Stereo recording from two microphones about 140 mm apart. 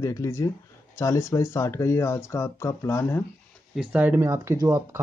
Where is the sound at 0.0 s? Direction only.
20° left (ahead or behind).